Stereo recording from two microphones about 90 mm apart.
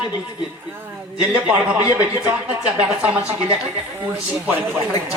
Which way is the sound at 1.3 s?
10° right (ahead or behind).